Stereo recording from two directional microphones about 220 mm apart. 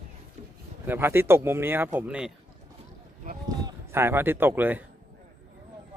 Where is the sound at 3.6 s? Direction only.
10° right (ahead or behind).